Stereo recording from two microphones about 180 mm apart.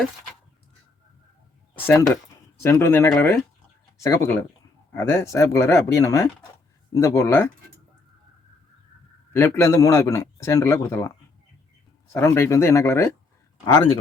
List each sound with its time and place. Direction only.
1.9 s a man's voice: 20° left (ahead or behind)
9.3 s a man's voice: 15° left (ahead or behind)
12.1 s a man's voice: 15° left (ahead or behind)